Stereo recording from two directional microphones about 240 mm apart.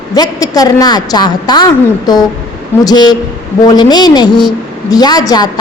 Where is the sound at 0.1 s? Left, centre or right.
Centre.